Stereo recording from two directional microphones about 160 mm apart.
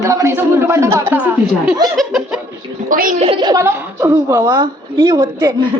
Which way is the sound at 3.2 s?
35° right (ahead or behind).